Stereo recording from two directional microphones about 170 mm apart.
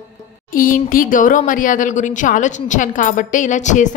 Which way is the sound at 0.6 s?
55° left (ahead or behind).